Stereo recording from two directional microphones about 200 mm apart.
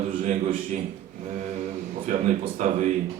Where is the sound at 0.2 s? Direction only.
35° right (ahead or behind).